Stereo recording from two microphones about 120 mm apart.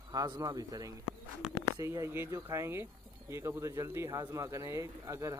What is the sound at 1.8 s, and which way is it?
Speech, 25° right (ahead or behind).